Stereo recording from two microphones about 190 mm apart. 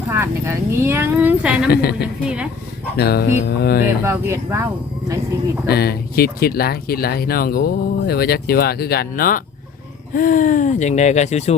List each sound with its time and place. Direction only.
0.1 s speech: 15° right (ahead or behind)
1.7 s mantra: 55° left (ahead or behind)
2.2 s speech: 5° right (ahead or behind)
3.0 s mantra: 55° left (ahead or behind)
4.0 s speech: 15° right (ahead or behind)
5.6 s speech: 55° left (ahead or behind); by 11.5 s 35° left (ahead or behind)